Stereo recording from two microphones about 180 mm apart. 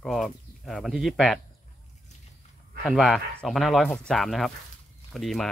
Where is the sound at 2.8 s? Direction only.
Centre (ahead or behind).